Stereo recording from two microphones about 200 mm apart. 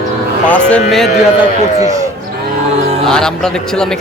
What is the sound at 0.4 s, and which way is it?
Speech, 5° left (ahead or behind).